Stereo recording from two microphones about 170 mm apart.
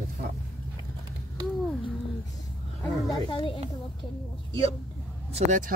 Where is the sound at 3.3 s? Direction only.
25° left (ahead or behind).